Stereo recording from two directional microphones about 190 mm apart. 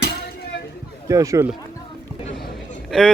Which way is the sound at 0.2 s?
55° left (ahead or behind).